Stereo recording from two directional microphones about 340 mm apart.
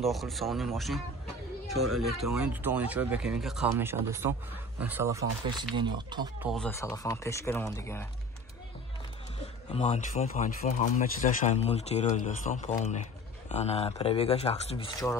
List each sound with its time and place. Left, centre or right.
0.0 s speech: centre
6.5 s speech: centre
9.7 s speech: centre